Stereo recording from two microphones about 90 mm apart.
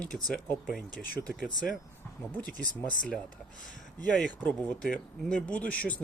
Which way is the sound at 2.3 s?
15° left (ahead or behind).